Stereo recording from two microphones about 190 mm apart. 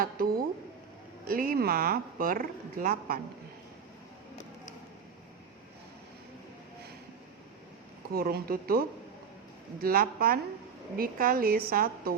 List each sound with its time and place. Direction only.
1.3 s a woman's voice: 50° right (ahead or behind)
8.1 s a woman's voice: 55° right (ahead or behind)